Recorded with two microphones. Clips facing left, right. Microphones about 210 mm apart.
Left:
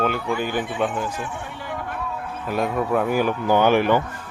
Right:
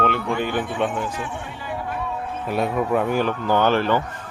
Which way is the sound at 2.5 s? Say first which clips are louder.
Right 1 dB; centre (ahead or behind).